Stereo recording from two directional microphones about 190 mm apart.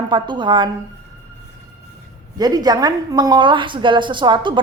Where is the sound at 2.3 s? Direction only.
20° right (ahead or behind).